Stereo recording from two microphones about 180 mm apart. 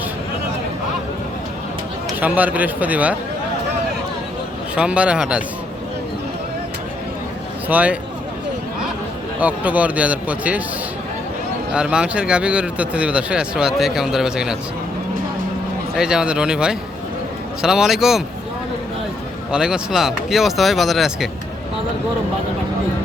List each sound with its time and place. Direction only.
2.2 s a man's voice: 10° right (ahead or behind)
4.7 s a man's voice: 5° right (ahead or behind)
7.7 s a man's voice: 10° right (ahead or behind)
9.4 s a man's voice: 10° right (ahead or behind)
11.7 s speech: 5° right (ahead or behind)
16.0 s speech: 5° right (ahead or behind)
19.5 s speech: 5° right (ahead or behind)